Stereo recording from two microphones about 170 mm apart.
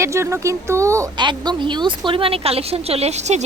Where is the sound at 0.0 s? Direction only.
15° right (ahead or behind).